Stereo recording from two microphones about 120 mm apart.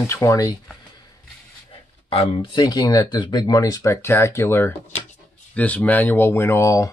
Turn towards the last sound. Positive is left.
turn(degrees=25)  # may be behind; listen again after turning